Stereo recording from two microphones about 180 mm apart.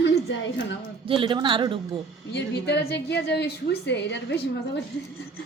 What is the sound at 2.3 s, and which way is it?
A woman's voice, 70° left (ahead or behind).